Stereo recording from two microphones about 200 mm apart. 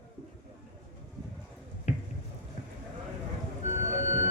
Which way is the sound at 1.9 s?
35° left (ahead or behind).